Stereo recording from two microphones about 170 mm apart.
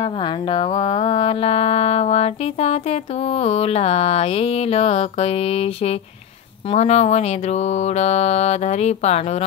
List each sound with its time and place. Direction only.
0.0 s music: 30° left (ahead or behind)